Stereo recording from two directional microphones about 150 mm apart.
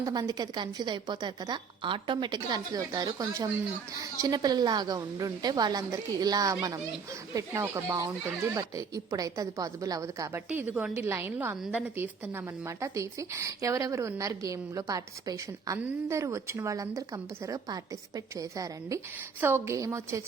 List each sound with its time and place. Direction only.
0.0 s a woman's voice: 25° right (ahead or behind)